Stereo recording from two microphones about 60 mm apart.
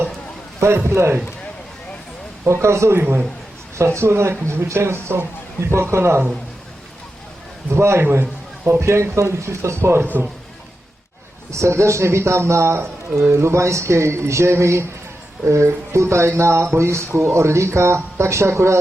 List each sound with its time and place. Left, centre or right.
0.6 s speech: right
2.4 s speech: right
7.7 s speech: right
8.2 s a sound: right
8.9 s speech: right
11.5 s speech: right